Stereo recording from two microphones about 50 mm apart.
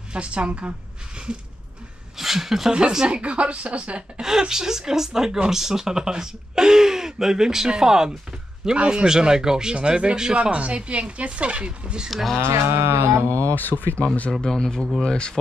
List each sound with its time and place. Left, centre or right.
0.1 s a woman's voice: right
2.1 s speech: centre; by 4.0 s right
4.2 s speech: centre
12.1 s speech: centre
12.4 s livestock: right
13.6 s speech: left
14.4 s speech: centre